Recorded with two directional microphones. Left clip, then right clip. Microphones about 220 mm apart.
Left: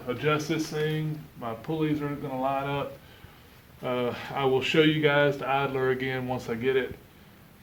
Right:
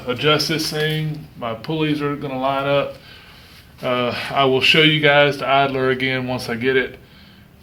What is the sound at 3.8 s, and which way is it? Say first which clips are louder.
A man's voice: right 9 dB; 5° left (ahead or behind).